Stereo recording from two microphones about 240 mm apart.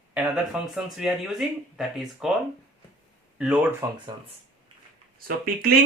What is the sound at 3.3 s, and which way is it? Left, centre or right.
Speech, centre.